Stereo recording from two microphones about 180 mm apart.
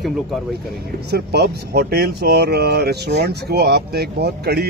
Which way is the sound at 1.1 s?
65° right (ahead or behind).